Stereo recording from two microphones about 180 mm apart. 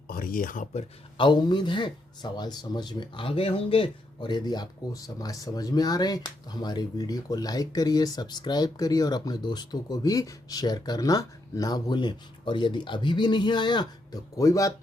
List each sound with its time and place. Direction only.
0.1 s speech: 50° left (ahead or behind); by 14.7 s 20° left (ahead or behind)